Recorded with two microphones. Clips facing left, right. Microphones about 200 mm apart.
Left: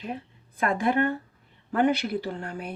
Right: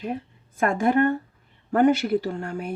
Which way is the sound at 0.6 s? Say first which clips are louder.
Right 4 dB; 50° right (ahead or behind).